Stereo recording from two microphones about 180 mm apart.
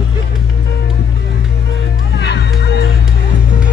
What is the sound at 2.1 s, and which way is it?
Music, 70° left (ahead or behind).